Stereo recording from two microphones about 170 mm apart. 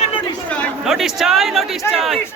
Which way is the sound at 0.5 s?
Centre (ahead or behind).